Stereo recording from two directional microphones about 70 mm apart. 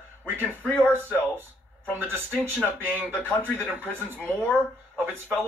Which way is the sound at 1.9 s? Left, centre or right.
Right.